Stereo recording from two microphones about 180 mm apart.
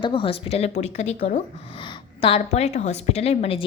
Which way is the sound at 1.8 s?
30° left (ahead or behind).